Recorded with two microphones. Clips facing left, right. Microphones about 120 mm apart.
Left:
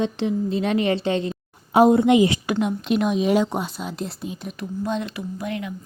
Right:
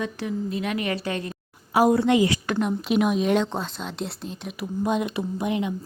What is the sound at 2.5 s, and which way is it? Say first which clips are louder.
Speech: left 1 dB; centre (ahead or behind).